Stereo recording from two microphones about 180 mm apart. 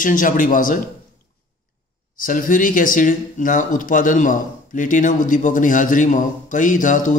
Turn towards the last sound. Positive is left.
turn(degrees=45)  # may be behind; listen again after turning